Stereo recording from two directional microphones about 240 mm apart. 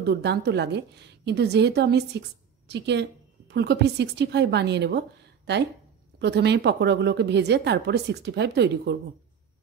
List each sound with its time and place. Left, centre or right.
0.0 s a woman's voice: right